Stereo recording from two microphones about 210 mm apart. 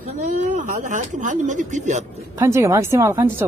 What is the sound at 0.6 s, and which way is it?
Speech, 35° right (ahead or behind).